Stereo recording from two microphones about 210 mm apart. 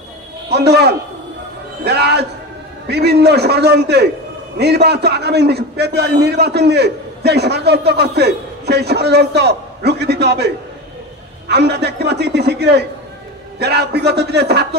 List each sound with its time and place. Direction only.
0.5 s a man's voice: 50° right (ahead or behind)